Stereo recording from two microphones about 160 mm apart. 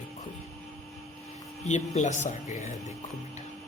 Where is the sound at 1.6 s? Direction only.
45° left (ahead or behind).